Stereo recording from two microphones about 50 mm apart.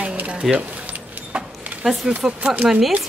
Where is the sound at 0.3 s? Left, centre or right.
Right.